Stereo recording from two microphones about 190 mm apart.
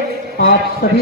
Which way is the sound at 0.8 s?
50° left (ahead or behind).